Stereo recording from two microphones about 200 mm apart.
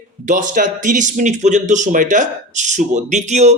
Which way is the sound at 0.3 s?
40° right (ahead or behind).